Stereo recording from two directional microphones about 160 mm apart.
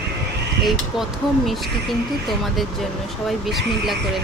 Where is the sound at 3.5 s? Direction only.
Centre (ahead or behind).